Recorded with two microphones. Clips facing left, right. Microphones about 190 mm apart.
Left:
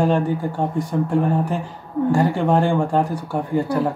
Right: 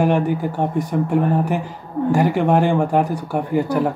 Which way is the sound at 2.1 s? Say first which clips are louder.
Right 2 dB; 15° right (ahead or behind).